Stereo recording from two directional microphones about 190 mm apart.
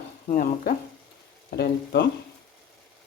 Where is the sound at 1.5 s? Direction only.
60° left (ahead or behind).